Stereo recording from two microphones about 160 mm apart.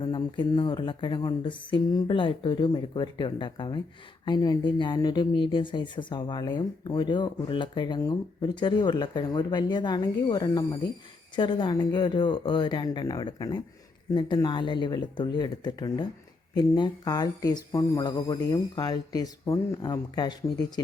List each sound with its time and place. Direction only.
0.0 s speech: 30° left (ahead or behind)